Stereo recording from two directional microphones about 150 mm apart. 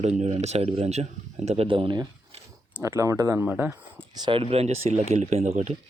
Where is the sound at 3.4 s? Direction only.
10° right (ahead or behind).